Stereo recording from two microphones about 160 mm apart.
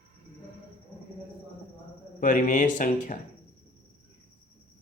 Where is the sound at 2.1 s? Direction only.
55° left (ahead or behind).